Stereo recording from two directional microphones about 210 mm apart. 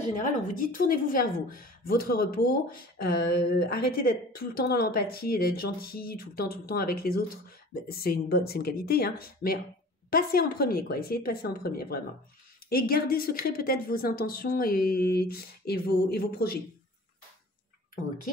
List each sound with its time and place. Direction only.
0.1 s a woman's voice: 40° left (ahead or behind)